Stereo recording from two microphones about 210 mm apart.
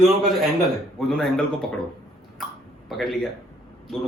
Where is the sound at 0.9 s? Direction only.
5° left (ahead or behind).